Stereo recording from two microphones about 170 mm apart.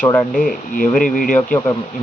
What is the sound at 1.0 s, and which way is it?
Speech, 50° left (ahead or behind).